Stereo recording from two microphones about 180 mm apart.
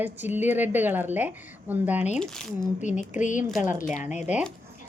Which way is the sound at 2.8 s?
40° left (ahead or behind).